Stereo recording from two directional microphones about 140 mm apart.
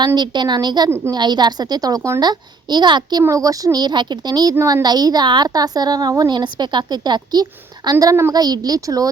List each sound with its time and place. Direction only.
0.0 s a child's voice: 30° right (ahead or behind)
0.9 s a woman's voice: 15° right (ahead or behind)
1.1 s a woman's voice: 30° right (ahead or behind)